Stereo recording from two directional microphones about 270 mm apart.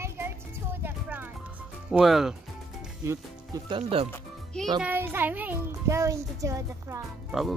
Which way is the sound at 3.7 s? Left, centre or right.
Centre.